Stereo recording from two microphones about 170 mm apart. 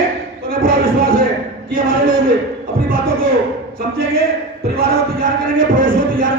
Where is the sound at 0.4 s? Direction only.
60° right (ahead or behind).